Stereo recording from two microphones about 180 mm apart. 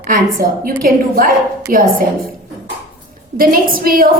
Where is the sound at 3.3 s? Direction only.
50° right (ahead or behind).